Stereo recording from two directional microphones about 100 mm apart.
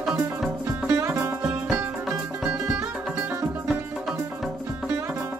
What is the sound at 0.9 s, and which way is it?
Music, 25° right (ahead or behind).